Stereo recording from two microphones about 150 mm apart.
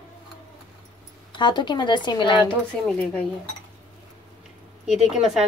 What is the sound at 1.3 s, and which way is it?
Speech, 30° left (ahead or behind).